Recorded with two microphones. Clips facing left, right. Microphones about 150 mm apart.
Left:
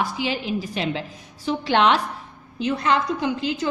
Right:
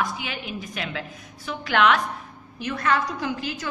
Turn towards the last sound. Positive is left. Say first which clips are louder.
# left 5 dB
turn(degrees=20)  # may be behind; listen again after turning